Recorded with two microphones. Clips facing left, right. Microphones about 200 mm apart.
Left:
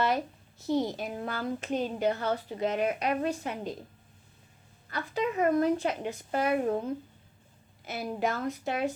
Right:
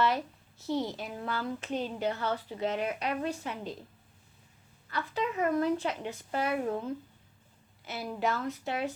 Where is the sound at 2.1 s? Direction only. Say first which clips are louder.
Left 3 dB; 45° left (ahead or behind).